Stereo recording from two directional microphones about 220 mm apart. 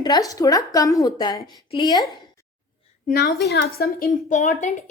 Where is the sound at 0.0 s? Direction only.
15° left (ahead or behind).